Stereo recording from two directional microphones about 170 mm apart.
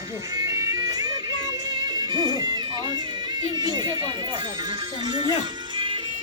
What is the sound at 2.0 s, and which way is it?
Music, 25° right (ahead or behind).